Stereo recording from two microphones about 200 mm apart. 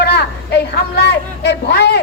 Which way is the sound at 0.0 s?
55° left (ahead or behind).